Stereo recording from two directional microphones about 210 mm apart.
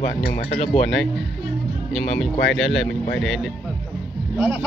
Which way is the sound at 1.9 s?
Centre (ahead or behind).